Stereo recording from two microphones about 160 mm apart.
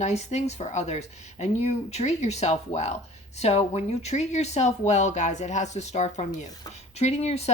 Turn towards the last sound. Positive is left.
turn(degrees=40)  # may be behind; listen again after turning